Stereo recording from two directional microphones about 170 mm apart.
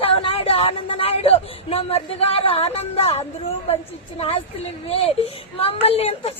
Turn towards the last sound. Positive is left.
turn(degrees=35)  # may be behind; listen again after turning